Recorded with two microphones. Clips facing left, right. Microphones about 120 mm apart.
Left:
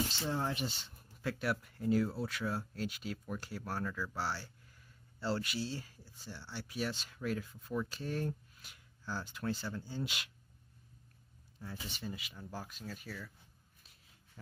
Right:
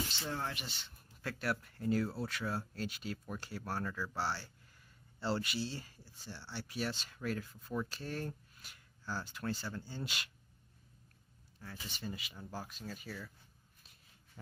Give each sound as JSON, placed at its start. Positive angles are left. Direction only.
{"t": 0.3, "sound": "speech", "side_deg": 15}
{"t": 0.6, "sound": "speech", "side_deg": 35}
{"t": 1.2, "sound": "speech", "side_deg": 10}
{"t": 7.9, "sound": "speech", "side_deg": 10}
{"t": 11.6, "sound": "speech", "side_deg": 0}